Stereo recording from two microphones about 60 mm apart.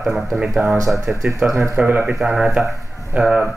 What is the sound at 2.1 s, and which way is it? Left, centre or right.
Speech, centre.